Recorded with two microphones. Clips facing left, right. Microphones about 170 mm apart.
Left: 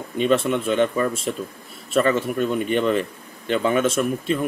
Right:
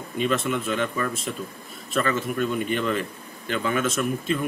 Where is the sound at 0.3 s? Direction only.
30° left (ahead or behind).